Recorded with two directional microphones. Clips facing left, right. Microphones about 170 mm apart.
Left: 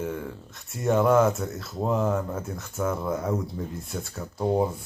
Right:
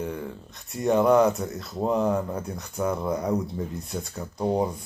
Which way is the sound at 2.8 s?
15° right (ahead or behind).